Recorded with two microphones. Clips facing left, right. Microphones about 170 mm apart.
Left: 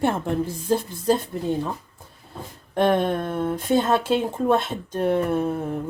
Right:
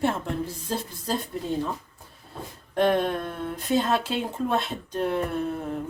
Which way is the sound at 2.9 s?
50° left (ahead or behind).